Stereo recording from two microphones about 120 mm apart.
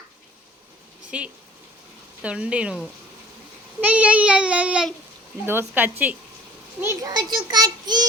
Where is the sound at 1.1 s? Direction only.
10° right (ahead or behind).